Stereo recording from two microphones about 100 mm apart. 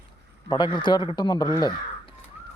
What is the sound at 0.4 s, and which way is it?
Speech, 50° left (ahead or behind).